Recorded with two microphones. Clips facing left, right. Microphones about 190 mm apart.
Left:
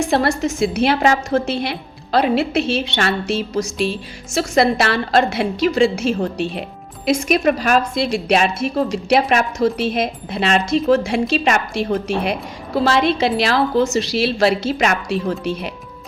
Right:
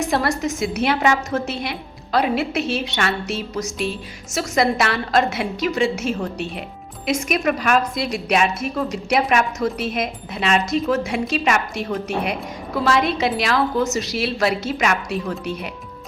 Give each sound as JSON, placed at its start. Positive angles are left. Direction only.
{"t": 0.0, "sound": "a woman's voice", "side_deg": 30}